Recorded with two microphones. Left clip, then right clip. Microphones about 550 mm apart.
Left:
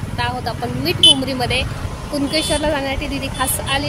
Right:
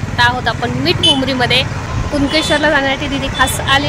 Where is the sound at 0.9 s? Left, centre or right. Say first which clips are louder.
Left 1 dB; left.